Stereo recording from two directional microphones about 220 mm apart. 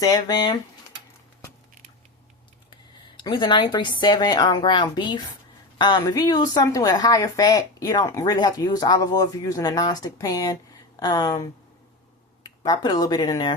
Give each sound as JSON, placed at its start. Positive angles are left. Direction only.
{"t": 0.0, "sound": "speech", "side_deg": 15}
{"t": 3.2, "sound": "speech", "side_deg": 20}